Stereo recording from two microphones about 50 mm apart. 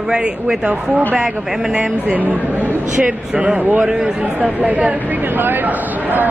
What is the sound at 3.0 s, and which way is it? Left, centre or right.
Speech, right.